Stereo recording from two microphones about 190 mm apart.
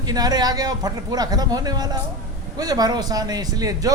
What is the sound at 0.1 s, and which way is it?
A man's voice, 20° right (ahead or behind).